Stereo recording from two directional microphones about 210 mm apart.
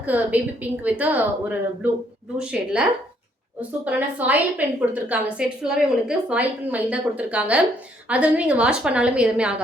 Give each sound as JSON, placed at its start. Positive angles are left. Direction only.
{"t": 0.0, "sound": "a woman's voice", "side_deg": -5}